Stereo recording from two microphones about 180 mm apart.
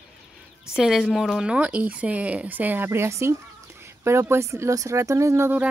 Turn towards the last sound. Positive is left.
turn(degrees=-10)  # may be behind; listen again after turning